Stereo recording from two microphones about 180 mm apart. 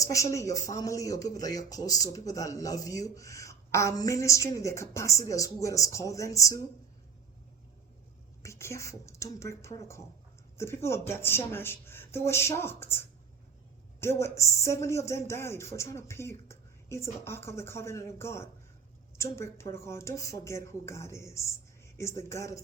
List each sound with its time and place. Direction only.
0.0 s speech: 15° left (ahead or behind)
8.4 s speech: 15° left (ahead or behind)